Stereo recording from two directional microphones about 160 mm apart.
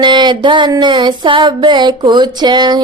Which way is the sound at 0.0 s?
30° right (ahead or behind).